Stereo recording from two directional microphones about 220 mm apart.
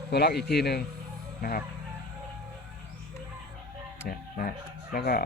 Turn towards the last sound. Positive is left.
turn(degrees=40)  # may be behind; listen again after turning